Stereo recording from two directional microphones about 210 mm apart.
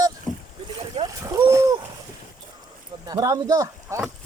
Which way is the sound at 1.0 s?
15° right (ahead or behind).